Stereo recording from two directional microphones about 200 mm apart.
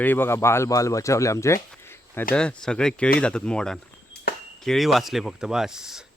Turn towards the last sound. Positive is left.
turn(degrees=-5)  # may be behind; listen again after turning